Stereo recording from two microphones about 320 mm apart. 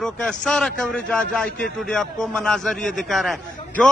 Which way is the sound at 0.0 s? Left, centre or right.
Centre.